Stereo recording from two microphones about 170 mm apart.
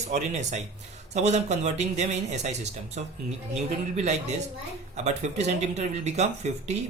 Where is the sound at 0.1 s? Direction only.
45° right (ahead or behind).